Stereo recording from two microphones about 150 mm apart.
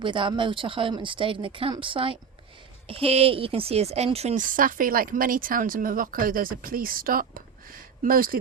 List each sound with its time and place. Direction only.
0.0 s speech: 35° right (ahead or behind)
4.4 s speech: 65° right (ahead or behind)